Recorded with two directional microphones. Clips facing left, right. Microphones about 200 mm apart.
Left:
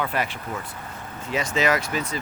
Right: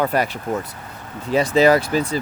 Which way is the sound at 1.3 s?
35° right (ahead or behind).